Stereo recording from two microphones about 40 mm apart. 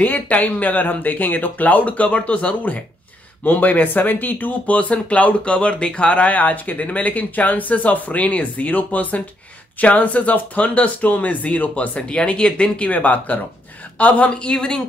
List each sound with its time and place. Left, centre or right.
0.0 s speech: left
3.4 s speech: left
12.1 s speech: left
14.5 s speech: centre